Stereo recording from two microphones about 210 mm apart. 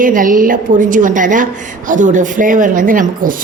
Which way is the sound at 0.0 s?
40° right (ahead or behind).